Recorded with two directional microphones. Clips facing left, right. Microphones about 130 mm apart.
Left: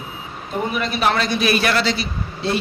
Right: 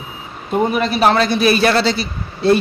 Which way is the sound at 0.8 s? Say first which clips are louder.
Right 4 dB; 35° right (ahead or behind).